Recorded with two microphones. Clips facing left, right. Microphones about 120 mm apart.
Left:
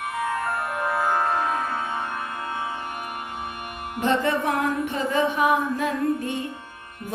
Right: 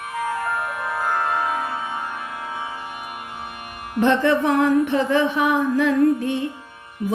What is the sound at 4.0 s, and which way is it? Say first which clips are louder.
Music: right 5 dB; 65° right (ahead or behind).